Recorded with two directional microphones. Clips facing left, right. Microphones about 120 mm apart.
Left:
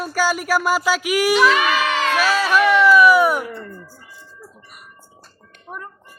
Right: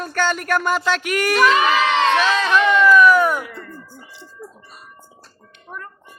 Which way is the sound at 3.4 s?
35° left (ahead or behind).